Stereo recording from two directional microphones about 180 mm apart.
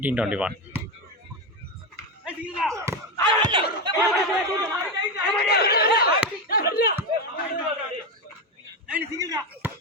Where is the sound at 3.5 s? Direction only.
25° right (ahead or behind).